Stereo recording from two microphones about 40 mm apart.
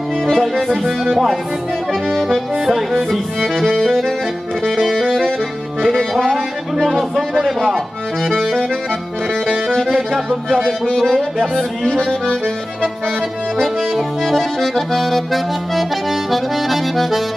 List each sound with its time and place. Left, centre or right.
0.3 s accordion: centre
0.7 s accordion: centre
3.6 s speech: centre
4.6 s accordion: centre
6.2 s music: centre
6.9 s accordion: centre
7.7 s speech: centre
9.3 s accordion: centre
9.9 s music: centre
11.1 s speech: centre
13.9 s accordion: centre